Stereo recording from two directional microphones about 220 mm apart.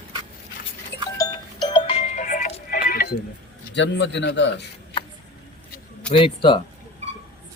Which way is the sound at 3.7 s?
55° left (ahead or behind).